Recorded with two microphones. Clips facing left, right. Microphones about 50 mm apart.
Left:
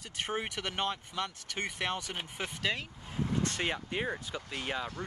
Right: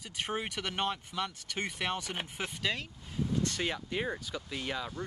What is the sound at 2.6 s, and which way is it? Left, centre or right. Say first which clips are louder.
Speech: left 1 dB; centre.